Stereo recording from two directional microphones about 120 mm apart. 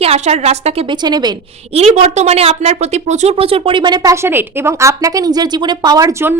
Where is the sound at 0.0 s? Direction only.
60° right (ahead or behind).